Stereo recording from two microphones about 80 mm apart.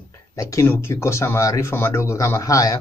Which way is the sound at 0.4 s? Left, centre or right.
Left.